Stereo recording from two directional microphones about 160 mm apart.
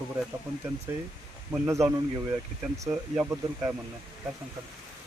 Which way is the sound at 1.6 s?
20° right (ahead or behind).